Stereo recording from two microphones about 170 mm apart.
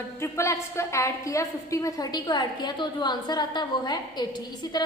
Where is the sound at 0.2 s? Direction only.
15° left (ahead or behind).